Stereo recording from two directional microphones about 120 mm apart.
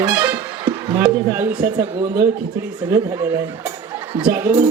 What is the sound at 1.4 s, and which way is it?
Speech, 15° right (ahead or behind).